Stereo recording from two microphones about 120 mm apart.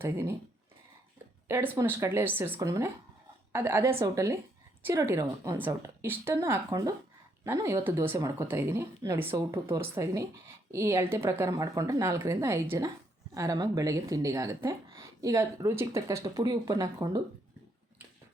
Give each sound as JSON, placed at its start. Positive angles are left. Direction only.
{"t": 0.0, "sound": "speech", "side_deg": -20}
{"t": 1.5, "sound": "speech", "side_deg": -20}